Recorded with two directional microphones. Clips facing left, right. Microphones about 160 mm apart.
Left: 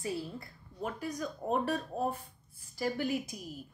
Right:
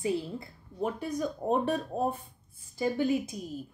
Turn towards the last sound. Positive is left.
turn(degrees=-20)  # may be behind; listen again after turning